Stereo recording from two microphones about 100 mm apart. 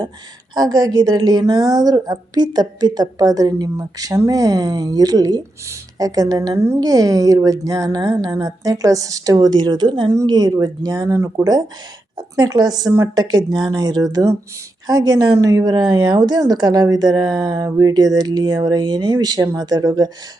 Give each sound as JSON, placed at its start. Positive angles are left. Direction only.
{"t": 0.5, "sound": "a woman's voice", "side_deg": -40}